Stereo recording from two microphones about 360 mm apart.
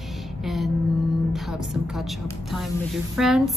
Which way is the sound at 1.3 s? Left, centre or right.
Centre.